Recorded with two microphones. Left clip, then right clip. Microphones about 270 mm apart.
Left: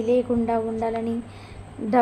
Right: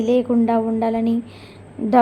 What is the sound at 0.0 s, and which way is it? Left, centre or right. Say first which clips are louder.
A woman's voice: right 3 dB; right.